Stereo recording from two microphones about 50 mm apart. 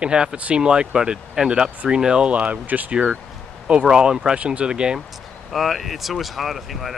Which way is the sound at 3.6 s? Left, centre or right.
Centre.